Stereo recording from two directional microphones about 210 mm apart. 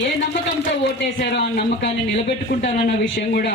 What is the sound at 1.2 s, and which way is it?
A man's voice, 55° left (ahead or behind).